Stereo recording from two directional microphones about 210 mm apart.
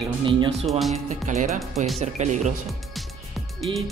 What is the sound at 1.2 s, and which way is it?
Speech, 35° right (ahead or behind).